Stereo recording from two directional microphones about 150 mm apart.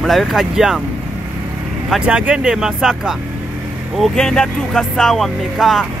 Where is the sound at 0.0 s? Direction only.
Centre (ahead or behind).